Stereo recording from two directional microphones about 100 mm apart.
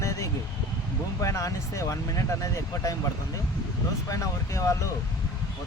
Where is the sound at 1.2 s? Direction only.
30° left (ahead or behind).